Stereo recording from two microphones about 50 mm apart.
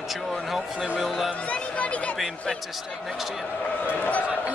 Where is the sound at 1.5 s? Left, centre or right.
Left.